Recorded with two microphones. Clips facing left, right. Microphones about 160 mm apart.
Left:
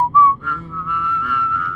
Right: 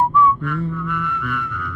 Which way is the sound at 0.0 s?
60° right (ahead or behind).